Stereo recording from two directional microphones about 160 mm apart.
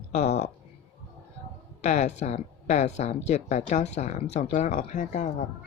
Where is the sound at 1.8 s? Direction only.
45° left (ahead or behind).